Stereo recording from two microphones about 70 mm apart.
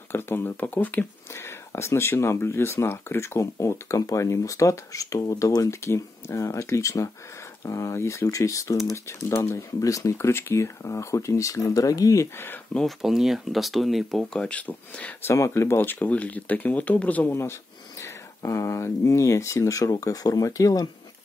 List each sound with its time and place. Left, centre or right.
0.1 s speech: left
1.3 s speech: left
12.8 s speech: centre
14.7 s speech: left
15.2 s speech: left
17.3 s speech: left